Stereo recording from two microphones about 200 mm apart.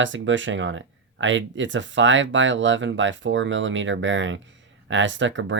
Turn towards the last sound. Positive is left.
turn(degrees=-65)  # may be behind; listen again after turning